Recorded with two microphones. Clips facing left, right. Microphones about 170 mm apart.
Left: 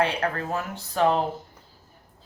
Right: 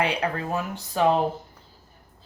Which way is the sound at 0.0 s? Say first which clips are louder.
Even; 15° right (ahead or behind).